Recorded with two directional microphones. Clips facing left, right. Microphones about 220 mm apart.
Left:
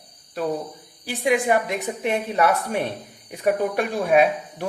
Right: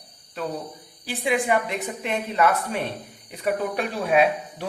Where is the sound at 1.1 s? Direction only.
40° left (ahead or behind).